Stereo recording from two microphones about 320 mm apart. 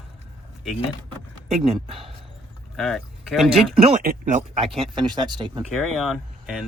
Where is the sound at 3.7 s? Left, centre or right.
Centre.